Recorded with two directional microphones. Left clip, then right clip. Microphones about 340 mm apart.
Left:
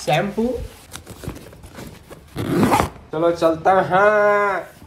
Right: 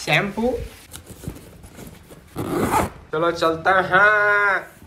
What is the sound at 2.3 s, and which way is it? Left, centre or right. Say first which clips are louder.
Zipper: left 3 dB; centre.